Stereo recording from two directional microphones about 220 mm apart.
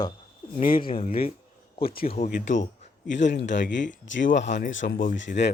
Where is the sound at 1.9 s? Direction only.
40° left (ahead or behind).